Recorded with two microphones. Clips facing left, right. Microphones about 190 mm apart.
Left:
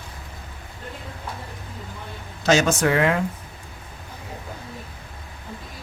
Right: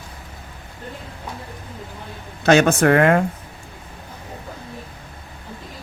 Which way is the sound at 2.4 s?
60° right (ahead or behind).